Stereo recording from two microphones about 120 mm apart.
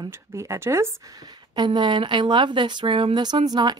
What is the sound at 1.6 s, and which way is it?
Speech, 40° right (ahead or behind).